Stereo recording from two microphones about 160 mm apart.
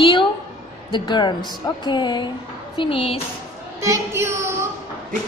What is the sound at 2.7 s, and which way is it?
Music, 35° left (ahead or behind).